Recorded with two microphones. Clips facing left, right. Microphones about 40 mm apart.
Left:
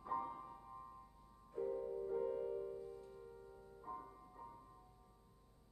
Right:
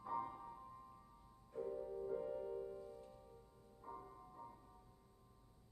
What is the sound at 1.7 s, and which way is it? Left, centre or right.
Music, centre.